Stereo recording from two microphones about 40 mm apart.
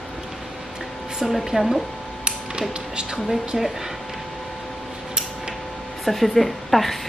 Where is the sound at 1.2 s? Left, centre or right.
Centre.